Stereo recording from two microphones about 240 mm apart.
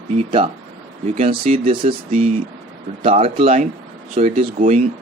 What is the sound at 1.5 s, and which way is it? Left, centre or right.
Speech, right.